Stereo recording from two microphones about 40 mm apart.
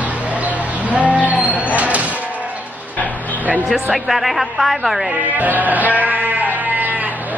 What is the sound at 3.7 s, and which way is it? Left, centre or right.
A woman's voice, centre.